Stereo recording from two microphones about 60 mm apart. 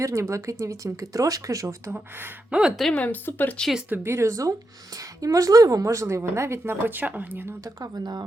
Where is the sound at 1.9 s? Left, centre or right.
Right.